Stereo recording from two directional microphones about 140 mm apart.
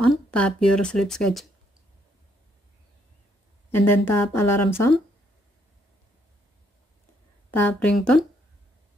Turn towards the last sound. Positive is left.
turn(degrees=10)  # may be behind; listen again after turning